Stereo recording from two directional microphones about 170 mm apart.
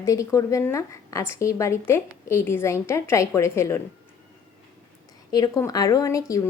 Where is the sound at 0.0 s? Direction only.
20° left (ahead or behind).